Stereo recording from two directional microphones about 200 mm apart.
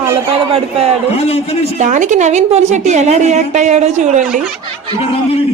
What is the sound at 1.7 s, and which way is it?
A woman's voice, 35° right (ahead or behind).